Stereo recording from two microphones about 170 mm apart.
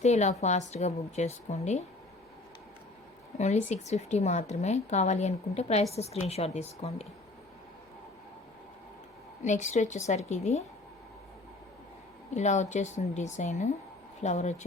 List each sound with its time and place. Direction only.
0.0 s a woman's voice: 40° left (ahead or behind)
3.3 s a woman's voice: 40° left (ahead or behind)
9.4 s a woman's voice: 45° left (ahead or behind)
12.3 s a woman's voice: 40° left (ahead or behind)